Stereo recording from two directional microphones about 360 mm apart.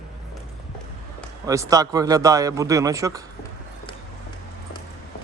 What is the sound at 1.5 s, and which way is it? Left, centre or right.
A man's voice, centre.